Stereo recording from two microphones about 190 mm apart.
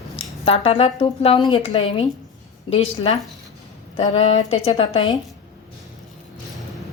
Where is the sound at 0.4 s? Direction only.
30° left (ahead or behind).